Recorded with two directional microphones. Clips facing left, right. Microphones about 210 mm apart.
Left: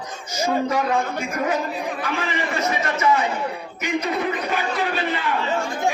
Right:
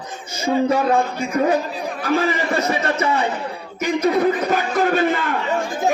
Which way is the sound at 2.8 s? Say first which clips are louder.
Right 1 dB; 35° right (ahead or behind).